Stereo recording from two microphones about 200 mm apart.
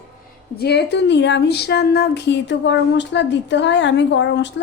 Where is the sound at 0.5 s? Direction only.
55° left (ahead or behind).